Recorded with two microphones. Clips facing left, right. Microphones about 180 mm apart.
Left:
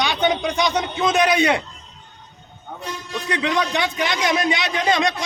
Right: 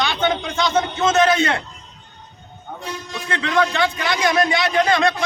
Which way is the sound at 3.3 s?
20° left (ahead or behind).